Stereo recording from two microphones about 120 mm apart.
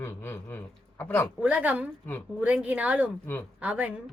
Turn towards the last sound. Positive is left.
turn(degrees=-10)  # may be behind; listen again after turning